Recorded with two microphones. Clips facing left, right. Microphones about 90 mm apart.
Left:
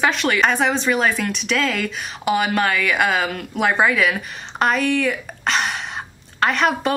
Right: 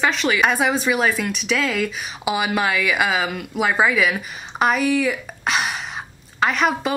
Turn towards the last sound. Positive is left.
turn(degrees=0)  # may be behind; listen again after turning